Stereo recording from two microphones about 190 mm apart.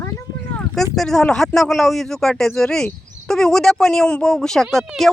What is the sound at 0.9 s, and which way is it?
Speech, 5° left (ahead or behind).